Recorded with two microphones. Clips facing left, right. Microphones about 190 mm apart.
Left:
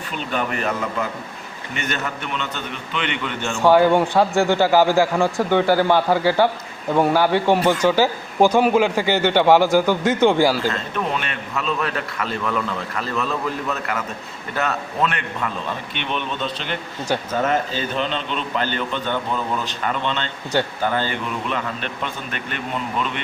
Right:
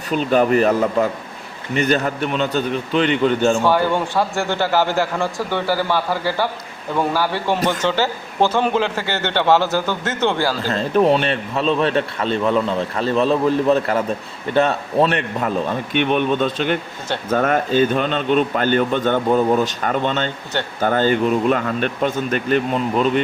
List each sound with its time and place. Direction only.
0.1 s a man's voice: 40° right (ahead or behind)
3.6 s a man's voice: 15° left (ahead or behind)
10.7 s a man's voice: 35° right (ahead or behind)
16.0 s a man's voice: 50° right (ahead or behind)